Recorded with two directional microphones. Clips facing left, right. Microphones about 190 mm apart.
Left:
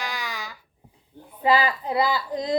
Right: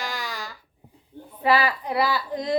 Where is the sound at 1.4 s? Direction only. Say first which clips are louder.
Even; 20° left (ahead or behind).